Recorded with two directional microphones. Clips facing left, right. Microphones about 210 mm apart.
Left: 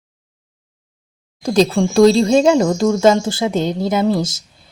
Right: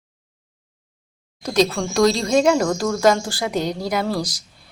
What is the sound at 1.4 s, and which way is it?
Speech, 30° left (ahead or behind).